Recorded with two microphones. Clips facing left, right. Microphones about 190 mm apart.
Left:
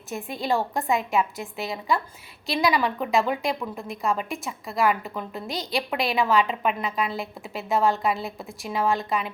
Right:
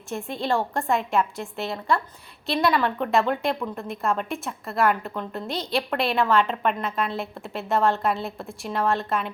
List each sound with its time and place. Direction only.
0.1 s a woman's voice: centre (ahead or behind)